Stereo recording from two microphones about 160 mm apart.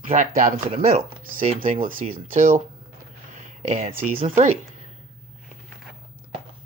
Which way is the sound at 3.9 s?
35° right (ahead or behind).